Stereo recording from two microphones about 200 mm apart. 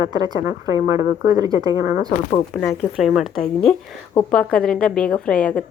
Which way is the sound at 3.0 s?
Centre (ahead or behind).